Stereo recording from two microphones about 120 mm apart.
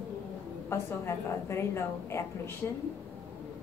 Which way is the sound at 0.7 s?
20° left (ahead or behind).